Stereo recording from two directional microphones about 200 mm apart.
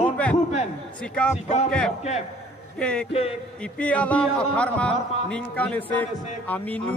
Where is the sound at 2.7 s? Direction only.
5° left (ahead or behind).